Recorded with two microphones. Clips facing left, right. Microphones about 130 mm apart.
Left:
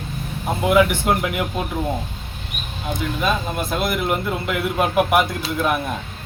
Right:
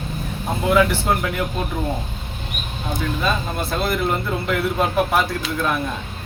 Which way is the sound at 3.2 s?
15° left (ahead or behind).